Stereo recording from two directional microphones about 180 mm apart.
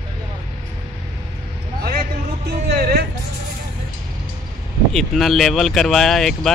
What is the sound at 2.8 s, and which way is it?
Music, 60° right (ahead or behind).